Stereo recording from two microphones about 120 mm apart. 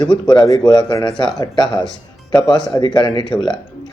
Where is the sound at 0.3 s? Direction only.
40° left (ahead or behind).